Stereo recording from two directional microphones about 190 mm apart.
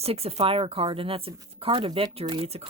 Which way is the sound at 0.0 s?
30° right (ahead or behind).